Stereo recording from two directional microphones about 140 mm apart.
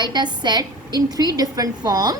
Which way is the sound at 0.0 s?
30° right (ahead or behind).